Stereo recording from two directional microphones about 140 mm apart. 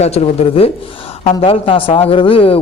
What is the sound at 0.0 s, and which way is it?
Speech, 45° left (ahead or behind).